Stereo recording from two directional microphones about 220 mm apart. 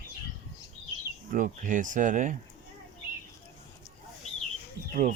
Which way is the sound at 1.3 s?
35° right (ahead or behind).